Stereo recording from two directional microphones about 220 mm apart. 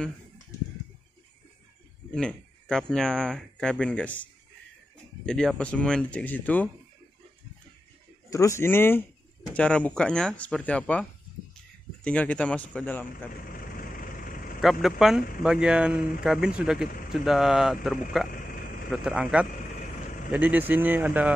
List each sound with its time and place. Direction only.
2.1 s speech: 5° left (ahead or behind)
8.3 s speech: 15° left (ahead or behind)
13.4 s vehicle: 40° left (ahead or behind)
14.6 s speech: centre (ahead or behind)
18.3 s a sound: 40° left (ahead or behind)
18.9 s speech: 5° right (ahead or behind)